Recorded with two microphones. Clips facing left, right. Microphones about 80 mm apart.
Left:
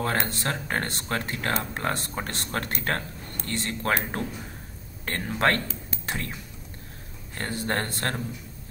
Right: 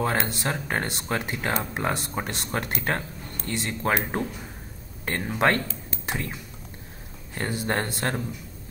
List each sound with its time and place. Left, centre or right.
0.3 s speech: centre
7.3 s speech: centre